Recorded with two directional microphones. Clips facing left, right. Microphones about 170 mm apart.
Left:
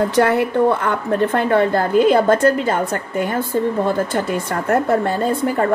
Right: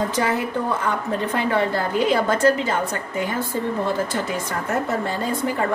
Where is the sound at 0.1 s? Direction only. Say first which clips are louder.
Left 7 dB; 65° left (ahead or behind).